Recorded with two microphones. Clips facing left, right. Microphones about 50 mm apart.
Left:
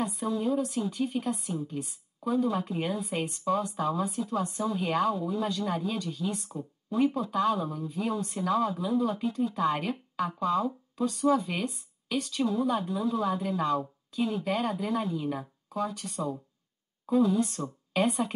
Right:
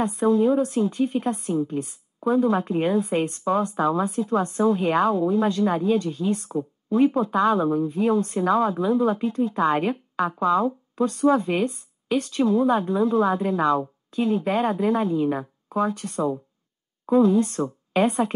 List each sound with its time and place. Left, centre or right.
0.0 s a woman's voice: right